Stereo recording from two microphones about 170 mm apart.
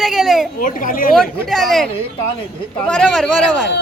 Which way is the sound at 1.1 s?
Centre (ahead or behind).